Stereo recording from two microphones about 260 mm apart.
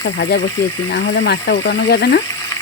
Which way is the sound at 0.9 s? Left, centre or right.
Left.